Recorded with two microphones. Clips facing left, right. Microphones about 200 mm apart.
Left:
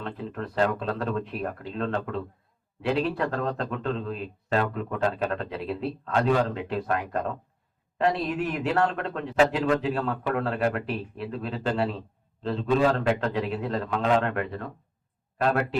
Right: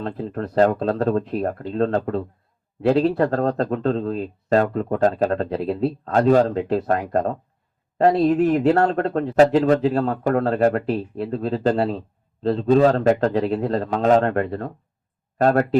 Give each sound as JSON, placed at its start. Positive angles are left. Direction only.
{"t": 0.0, "sound": "a man's voice", "side_deg": -40}